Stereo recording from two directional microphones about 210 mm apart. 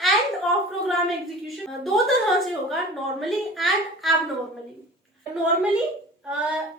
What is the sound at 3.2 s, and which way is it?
Speech, centre (ahead or behind).